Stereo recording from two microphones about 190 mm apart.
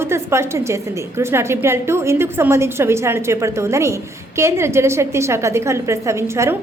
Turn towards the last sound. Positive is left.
turn(degrees=-15)  # may be behind; listen again after turning